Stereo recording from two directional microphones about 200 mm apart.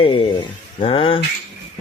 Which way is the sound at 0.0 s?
25° left (ahead or behind).